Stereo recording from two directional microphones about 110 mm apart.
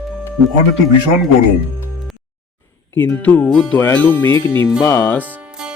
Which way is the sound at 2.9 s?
15° left (ahead or behind).